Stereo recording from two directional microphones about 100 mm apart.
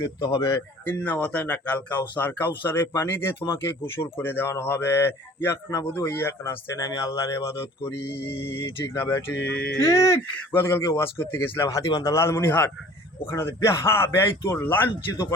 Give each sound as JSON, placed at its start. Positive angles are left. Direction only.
{"t": 0.0, "sound": "a man's voice", "side_deg": 50}
{"t": 0.9, "sound": "a man's voice", "side_deg": 15}
{"t": 7.5, "sound": "speech", "side_deg": 60}
{"t": 8.2, "sound": "a man's voice", "side_deg": 25}
{"t": 9.8, "sound": "a man's voice", "side_deg": 35}
{"t": 11.7, "sound": "speech", "side_deg": 40}
{"t": 12.1, "sound": "a man's voice", "side_deg": 25}